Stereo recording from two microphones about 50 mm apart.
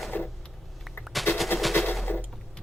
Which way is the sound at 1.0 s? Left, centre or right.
Centre.